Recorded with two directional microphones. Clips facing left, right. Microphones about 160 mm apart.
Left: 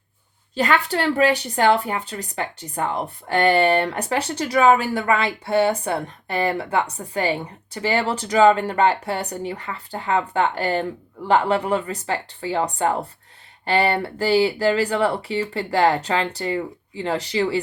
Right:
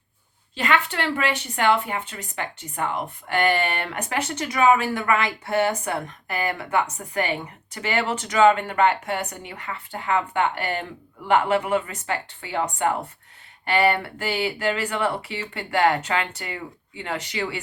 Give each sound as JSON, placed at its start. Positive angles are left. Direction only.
{"t": 0.5, "sound": "a woman's voice", "side_deg": 35}